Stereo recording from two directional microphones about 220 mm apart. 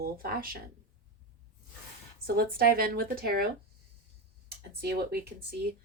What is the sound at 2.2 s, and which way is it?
Speech, 45° right (ahead or behind).